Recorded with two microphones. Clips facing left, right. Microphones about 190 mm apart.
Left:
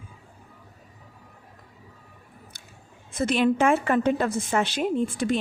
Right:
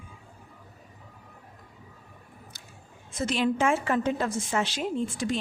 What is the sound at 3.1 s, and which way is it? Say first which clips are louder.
A woman's voice: left 4 dB; 60° left (ahead or behind).